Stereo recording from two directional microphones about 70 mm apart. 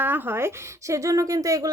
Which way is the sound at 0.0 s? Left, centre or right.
Right.